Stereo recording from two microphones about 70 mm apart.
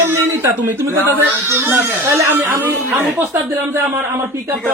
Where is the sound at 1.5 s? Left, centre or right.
Right.